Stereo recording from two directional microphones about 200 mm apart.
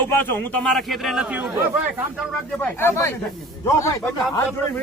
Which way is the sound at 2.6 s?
10° left (ahead or behind).